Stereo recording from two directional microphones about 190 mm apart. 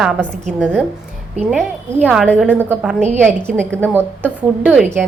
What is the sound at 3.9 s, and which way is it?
A woman's voice, 10° right (ahead or behind).